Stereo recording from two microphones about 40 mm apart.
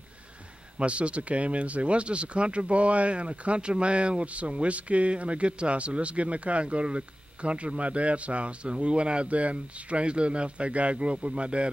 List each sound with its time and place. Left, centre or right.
0.7 s speech: right